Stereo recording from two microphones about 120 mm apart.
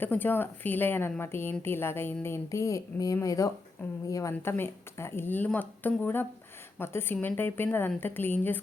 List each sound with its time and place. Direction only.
0.0 s a woman's voice: 15° left (ahead or behind)